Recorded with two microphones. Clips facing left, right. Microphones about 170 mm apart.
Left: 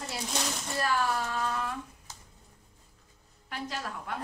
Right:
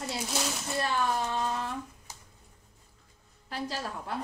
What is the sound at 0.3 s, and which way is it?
Child singing, 5° right (ahead or behind).